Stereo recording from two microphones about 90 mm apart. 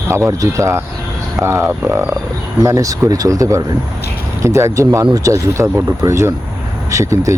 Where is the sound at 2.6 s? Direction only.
40° right (ahead or behind).